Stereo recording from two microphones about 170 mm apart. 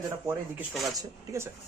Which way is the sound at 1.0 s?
15° right (ahead or behind).